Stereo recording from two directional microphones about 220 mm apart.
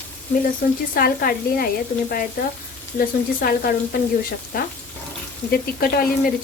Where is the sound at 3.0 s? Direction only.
40° left (ahead or behind).